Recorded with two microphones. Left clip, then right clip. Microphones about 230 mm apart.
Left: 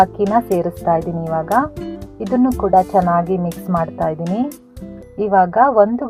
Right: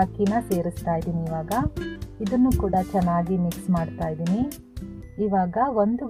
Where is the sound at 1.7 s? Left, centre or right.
Centre.